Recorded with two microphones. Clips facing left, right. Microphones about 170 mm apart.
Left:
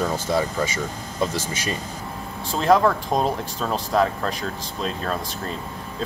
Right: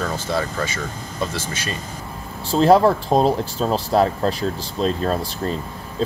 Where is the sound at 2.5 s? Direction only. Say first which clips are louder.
Right 4 dB; 30° right (ahead or behind).